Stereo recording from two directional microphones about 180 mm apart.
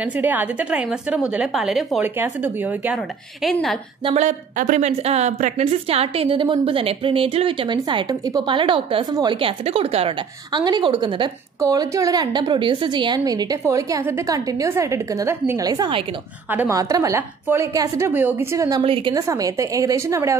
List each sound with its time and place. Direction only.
0.0 s a woman's voice: 10° right (ahead or behind)
3.4 s a woman's voice: centre (ahead or behind)
4.0 s a woman's voice: 40° right (ahead or behind); by 18.8 s 15° right (ahead or behind)
18.8 s a woman's voice: 30° right (ahead or behind)
19.1 s a woman's voice: 20° right (ahead or behind)